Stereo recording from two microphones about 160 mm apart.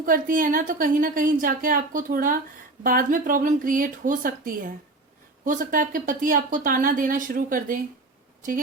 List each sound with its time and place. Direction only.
0.0 s a woman's voice: 60° right (ahead or behind)